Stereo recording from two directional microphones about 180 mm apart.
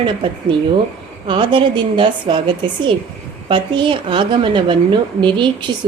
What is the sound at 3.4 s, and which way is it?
A woman's voice, 30° right (ahead or behind).